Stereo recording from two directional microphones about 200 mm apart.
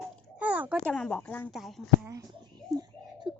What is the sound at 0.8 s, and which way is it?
Speech, 5° left (ahead or behind).